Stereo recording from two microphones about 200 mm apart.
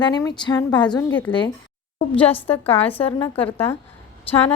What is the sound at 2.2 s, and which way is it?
A woman's voice, 10° left (ahead or behind).